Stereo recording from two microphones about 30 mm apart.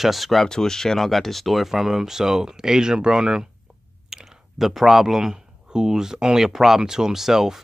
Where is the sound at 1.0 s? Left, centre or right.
Centre.